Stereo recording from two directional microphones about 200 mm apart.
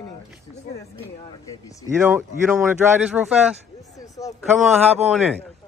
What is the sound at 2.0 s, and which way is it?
Speech, 10° right (ahead or behind).